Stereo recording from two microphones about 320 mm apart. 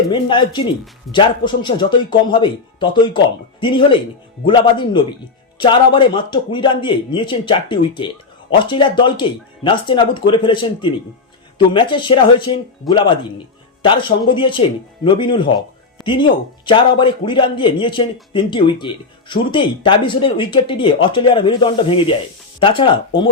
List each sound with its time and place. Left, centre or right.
0.1 s speech: centre
12.8 s speech: centre
13.8 s speech: centre